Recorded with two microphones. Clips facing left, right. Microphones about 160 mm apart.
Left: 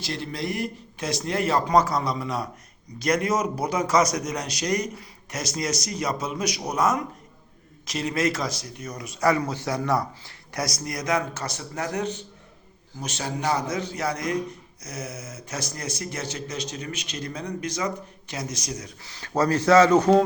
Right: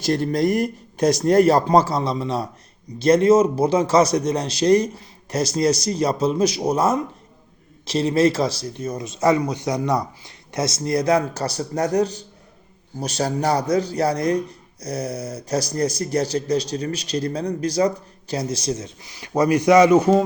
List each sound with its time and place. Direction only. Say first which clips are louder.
0.0 s speech: right 11 dB; 45° right (ahead or behind); by 18.9 s 30° right (ahead or behind)
19.0 s speech: right 4 dB; 15° right (ahead or behind)